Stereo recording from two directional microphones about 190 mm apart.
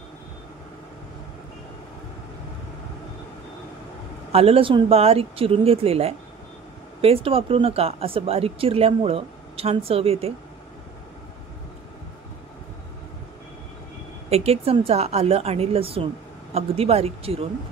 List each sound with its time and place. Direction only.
4.3 s speech: 30° right (ahead or behind)
14.3 s speech: 30° right (ahead or behind)